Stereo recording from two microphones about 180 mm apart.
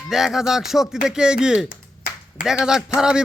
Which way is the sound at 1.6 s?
55° left (ahead or behind).